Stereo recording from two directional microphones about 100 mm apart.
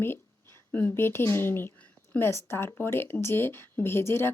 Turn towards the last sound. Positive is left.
turn(degrees=25)  # may be behind; listen again after turning